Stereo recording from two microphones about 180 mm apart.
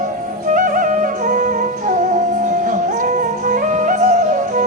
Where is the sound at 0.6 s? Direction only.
50° right (ahead or behind).